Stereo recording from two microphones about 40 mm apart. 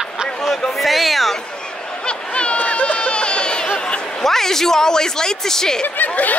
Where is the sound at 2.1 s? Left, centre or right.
Left.